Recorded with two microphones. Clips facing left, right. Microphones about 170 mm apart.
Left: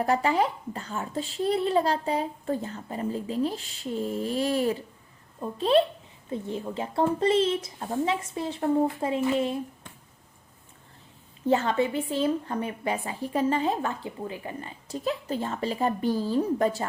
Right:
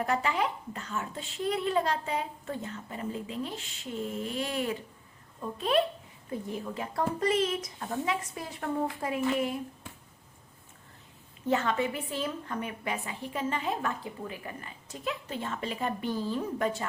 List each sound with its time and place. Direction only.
0.0 s a woman's voice: 35° left (ahead or behind)
11.4 s a woman's voice: 30° left (ahead or behind)